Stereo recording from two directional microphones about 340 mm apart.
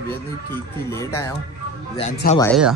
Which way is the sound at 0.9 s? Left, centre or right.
Centre.